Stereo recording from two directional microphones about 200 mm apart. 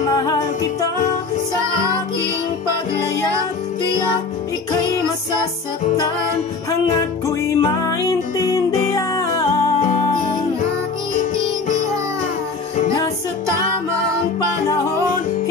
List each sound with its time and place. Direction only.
0.1 s music: 20° left (ahead or behind)
7.2 s music: 15° left (ahead or behind)